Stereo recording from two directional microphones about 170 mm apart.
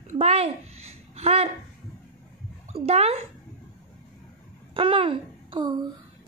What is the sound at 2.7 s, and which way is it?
Speech, 35° right (ahead or behind).